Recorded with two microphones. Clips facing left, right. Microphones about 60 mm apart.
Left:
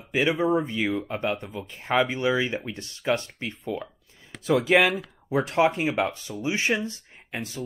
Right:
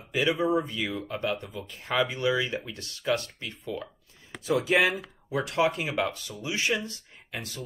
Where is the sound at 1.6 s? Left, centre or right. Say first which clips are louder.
Left 4 dB; left.